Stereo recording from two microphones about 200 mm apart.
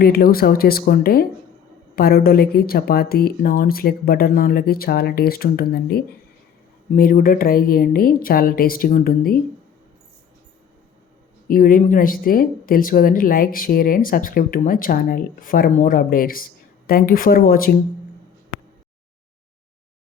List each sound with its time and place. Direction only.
0.0 s speech: 50° left (ahead or behind)
11.4 s speech: 45° left (ahead or behind)